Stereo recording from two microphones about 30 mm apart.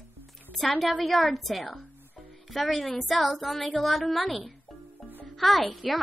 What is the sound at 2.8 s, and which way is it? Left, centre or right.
Speech, centre.